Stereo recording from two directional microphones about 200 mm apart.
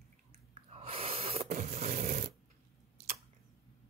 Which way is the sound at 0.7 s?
30° right (ahead or behind).